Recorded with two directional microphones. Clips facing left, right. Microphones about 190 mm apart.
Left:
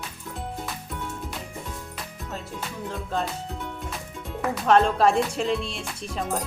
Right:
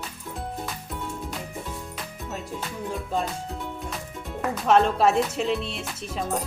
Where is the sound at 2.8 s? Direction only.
Centre (ahead or behind).